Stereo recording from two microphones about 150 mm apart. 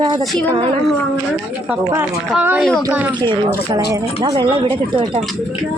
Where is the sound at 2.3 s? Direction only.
10° right (ahead or behind).